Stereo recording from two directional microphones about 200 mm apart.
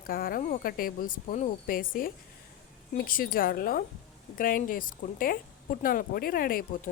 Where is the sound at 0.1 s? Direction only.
45° left (ahead or behind).